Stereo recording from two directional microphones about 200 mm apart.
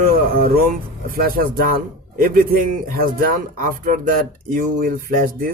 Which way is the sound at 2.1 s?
45° right (ahead or behind).